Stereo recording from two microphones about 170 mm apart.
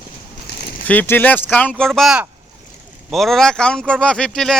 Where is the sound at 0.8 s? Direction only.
10° left (ahead or behind).